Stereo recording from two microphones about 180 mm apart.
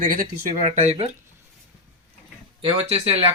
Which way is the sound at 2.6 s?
35° right (ahead or behind).